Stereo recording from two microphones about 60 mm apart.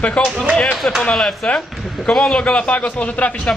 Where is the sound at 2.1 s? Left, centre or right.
Centre.